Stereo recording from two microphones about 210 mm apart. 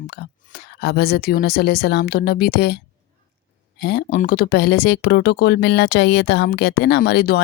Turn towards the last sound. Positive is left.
turn(degrees=50)  # may be behind; listen again after turning